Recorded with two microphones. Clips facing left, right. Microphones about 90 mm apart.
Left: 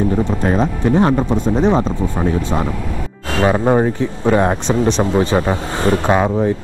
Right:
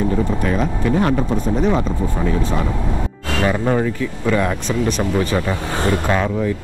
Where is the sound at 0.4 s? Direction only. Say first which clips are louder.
Left 3 dB; 35° left (ahead or behind).